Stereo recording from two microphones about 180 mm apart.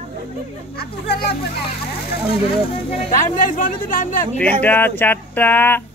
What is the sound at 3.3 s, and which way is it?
Speech, 50° left (ahead or behind).